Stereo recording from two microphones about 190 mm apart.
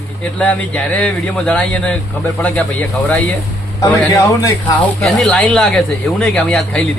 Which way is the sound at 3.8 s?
15° left (ahead or behind).